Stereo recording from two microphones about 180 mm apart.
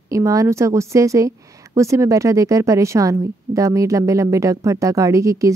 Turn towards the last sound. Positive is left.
turn(degrees=-15)  # may be behind; listen again after turning